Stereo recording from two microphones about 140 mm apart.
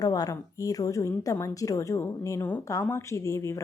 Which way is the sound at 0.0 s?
25° left (ahead or behind).